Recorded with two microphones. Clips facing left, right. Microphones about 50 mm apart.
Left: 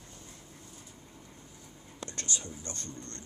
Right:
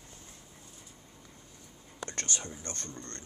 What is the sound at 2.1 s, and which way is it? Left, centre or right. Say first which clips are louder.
Speech: right 1 dB; right.